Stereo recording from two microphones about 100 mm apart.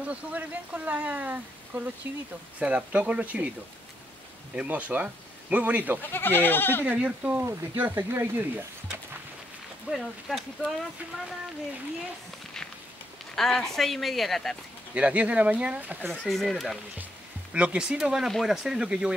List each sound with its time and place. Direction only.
0.0 s speech: 15° right (ahead or behind)
4.6 s speech: 15° right (ahead or behind)
6.0 s speech: 20° left (ahead or behind)
6.9 s speech: 15° right (ahead or behind)
9.8 s speech: centre (ahead or behind)
13.3 s speech: 5° left (ahead or behind)
15.0 s speech: 15° right (ahead or behind)
16.3 s speech: centre (ahead or behind)
17.0 s speech: 10° right (ahead or behind)